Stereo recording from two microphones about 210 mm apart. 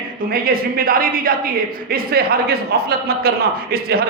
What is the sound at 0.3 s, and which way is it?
A man's voice, 45° right (ahead or behind).